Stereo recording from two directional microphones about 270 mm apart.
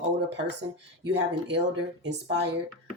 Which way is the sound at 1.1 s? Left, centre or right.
Right.